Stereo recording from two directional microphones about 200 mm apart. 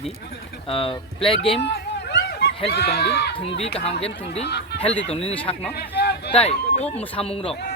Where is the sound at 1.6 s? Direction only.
55° left (ahead or behind).